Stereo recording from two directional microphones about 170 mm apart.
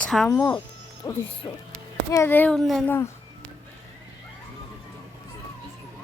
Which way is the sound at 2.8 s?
15° left (ahead or behind).